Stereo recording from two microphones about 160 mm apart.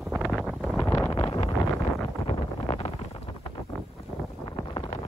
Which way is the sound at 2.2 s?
30° left (ahead or behind).